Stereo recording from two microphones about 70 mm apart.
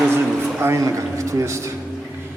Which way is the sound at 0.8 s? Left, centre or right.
Right.